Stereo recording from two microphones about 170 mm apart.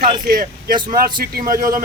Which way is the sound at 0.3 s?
60° right (ahead or behind).